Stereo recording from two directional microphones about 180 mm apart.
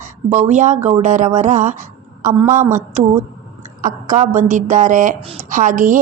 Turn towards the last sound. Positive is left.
turn(degrees=-45)  # may be behind; listen again after turning